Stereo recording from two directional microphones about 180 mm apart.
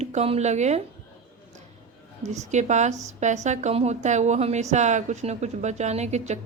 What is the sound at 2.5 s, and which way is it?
Speech, 40° right (ahead or behind).